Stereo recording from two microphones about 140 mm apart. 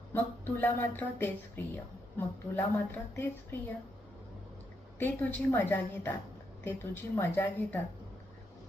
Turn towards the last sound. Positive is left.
turn(degrees=15)  # may be behind; listen again after turning